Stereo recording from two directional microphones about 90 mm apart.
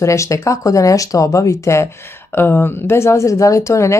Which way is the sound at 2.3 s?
25° left (ahead or behind).